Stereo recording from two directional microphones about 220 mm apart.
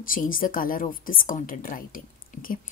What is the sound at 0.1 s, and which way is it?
A woman's voice, 40° left (ahead or behind).